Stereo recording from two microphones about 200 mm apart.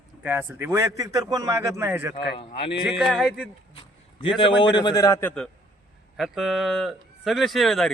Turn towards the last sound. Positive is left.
turn(degrees=0)  # may be behind; listen again after turning